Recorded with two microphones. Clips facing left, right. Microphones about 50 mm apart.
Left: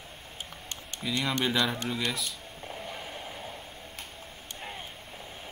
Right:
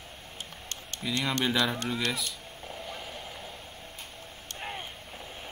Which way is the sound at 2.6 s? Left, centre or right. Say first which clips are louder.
Left 1 dB; centre.